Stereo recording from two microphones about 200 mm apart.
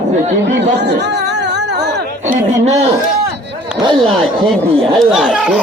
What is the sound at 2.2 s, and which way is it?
Speech, 35° right (ahead or behind).